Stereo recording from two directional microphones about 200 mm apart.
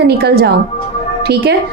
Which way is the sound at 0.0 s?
55° right (ahead or behind).